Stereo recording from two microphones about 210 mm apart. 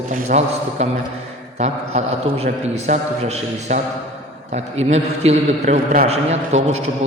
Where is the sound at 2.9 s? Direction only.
30° right (ahead or behind).